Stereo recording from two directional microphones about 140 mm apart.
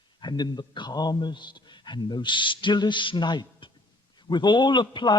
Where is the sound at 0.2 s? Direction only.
30° left (ahead or behind).